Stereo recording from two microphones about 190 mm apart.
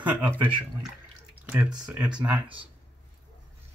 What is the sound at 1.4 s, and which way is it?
Speech, 5° right (ahead or behind).